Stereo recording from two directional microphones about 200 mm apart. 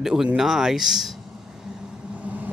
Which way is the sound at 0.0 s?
5° right (ahead or behind).